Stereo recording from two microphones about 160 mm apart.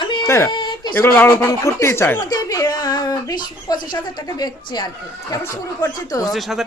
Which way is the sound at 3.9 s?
25° left (ahead or behind).